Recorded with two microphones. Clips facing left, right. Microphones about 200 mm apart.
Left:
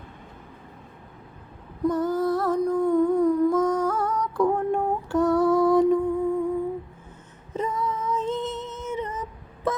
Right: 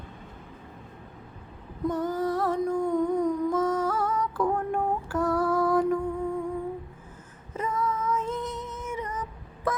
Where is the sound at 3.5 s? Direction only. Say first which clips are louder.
Left 3 dB; 5° right (ahead or behind).